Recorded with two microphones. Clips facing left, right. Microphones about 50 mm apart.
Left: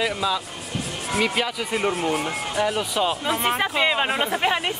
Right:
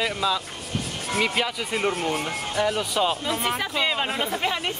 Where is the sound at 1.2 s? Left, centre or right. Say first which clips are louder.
Left 1 dB; centre.